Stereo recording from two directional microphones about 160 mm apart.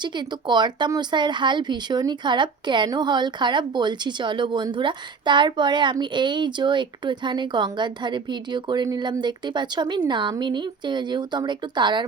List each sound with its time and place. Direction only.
0.0 s speech: 30° right (ahead or behind)